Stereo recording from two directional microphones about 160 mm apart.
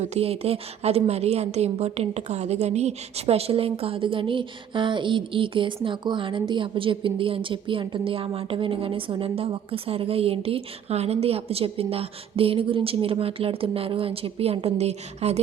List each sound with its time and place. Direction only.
0.0 s a woman's voice: 40° right (ahead or behind)